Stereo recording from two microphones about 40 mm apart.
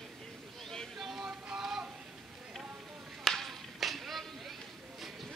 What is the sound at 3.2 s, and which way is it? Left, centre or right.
Clapping, centre.